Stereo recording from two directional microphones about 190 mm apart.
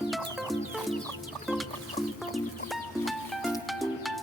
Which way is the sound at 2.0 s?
15° left (ahead or behind).